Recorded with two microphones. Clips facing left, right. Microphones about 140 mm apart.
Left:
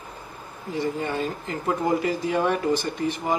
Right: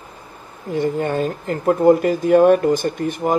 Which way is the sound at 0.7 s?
55° right (ahead or behind).